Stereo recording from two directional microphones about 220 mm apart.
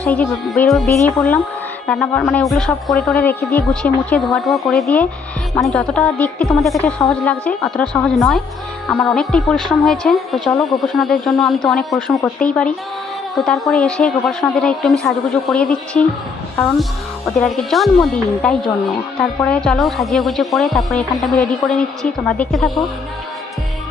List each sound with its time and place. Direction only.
0.0 s speech: 5° left (ahead or behind)
17.2 s speech: centre (ahead or behind)